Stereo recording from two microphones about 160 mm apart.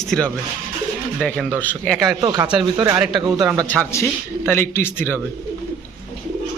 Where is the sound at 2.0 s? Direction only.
25° right (ahead or behind).